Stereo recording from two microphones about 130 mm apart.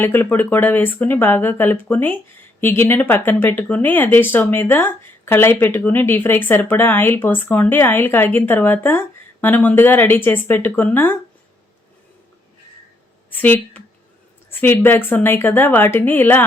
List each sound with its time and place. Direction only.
0.0 s speech: 15° left (ahead or behind)
13.3 s speech: 15° left (ahead or behind)